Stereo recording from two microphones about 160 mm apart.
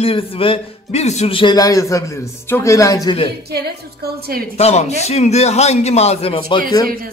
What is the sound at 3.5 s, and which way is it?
Speech, 80° right.